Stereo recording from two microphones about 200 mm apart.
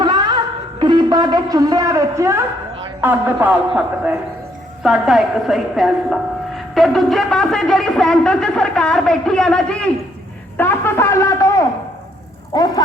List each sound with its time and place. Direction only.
0.0 s music: 20° right (ahead or behind)
0.8 s a woman's voice: 20° right (ahead or behind); by 11.6 s 15° left (ahead or behind)
12.5 s a sound: 20° left (ahead or behind)